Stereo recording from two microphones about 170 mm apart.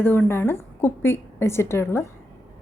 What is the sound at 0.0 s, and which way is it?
A woman's voice, 10° left (ahead or behind).